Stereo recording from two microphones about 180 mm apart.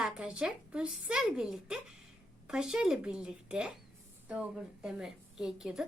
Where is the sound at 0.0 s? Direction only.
5° right (ahead or behind).